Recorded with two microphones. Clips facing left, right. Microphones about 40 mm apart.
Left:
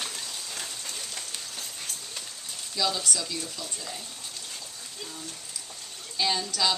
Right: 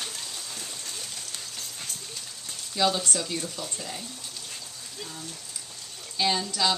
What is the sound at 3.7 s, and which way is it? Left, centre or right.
Speech, centre.